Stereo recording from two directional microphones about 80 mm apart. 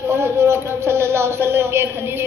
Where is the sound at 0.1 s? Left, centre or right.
Right.